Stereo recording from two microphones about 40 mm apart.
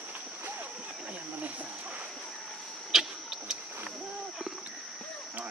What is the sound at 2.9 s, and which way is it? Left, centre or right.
Vehicle, centre.